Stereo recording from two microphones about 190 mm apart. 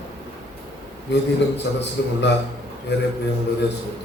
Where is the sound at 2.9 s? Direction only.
65° left (ahead or behind).